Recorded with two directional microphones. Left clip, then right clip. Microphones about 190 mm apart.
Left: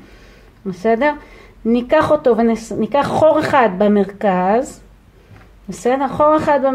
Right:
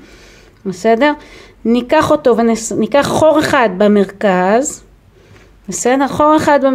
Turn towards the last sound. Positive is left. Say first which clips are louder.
# right 3 dB
turn(degrees=-30)  # may be behind; listen again after turning